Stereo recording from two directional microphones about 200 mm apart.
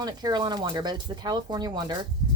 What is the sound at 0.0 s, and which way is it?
Speech, 20° right (ahead or behind).